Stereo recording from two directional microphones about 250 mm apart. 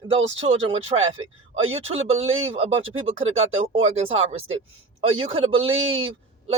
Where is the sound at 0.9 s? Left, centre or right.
Right.